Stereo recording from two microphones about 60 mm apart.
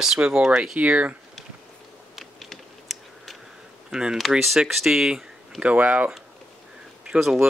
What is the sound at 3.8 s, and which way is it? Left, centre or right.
Speech, centre.